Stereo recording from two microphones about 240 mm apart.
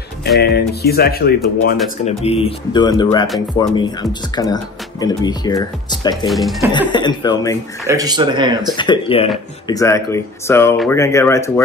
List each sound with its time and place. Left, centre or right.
0.4 s speech: left
2.0 s speech: left
5.0 s speech: centre
6.2 s speech: centre
6.9 s speech: centre
7.8 s speech: centre
8.7 s speech: centre